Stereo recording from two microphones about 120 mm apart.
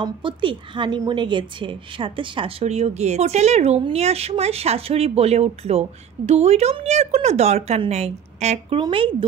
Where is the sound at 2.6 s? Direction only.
65° right (ahead or behind).